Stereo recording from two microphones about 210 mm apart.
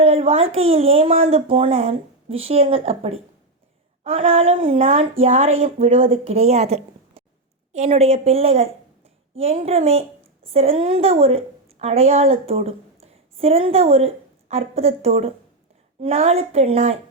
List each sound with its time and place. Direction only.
0.0 s a woman's voice: 30° right (ahead or behind)